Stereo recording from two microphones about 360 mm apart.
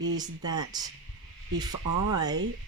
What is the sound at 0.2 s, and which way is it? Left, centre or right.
Speech, centre.